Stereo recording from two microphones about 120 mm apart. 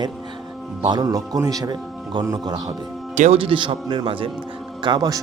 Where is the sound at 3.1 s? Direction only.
80° right.